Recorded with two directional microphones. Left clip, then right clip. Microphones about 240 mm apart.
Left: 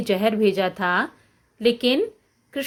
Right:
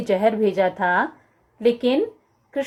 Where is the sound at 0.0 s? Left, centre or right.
Left.